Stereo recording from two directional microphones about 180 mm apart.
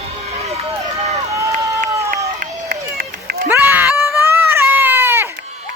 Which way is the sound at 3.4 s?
10° right (ahead or behind).